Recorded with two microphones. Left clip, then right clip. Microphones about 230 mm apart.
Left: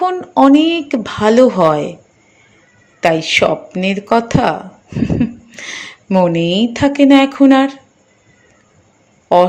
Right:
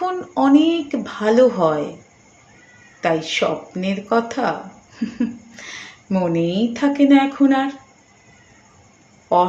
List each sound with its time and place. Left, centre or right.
0.0 s speech: left
3.0 s speech: left